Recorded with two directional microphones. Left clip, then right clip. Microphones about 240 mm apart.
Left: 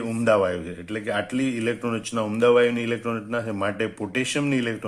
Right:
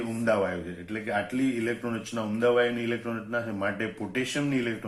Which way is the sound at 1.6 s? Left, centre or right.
Left.